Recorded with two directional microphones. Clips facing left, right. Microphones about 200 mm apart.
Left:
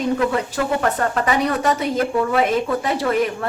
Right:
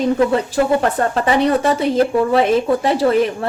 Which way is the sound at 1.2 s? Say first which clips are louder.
Right 4 dB; 30° right (ahead or behind).